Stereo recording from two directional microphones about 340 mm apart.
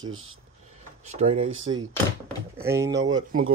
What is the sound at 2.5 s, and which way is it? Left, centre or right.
Speech, centre.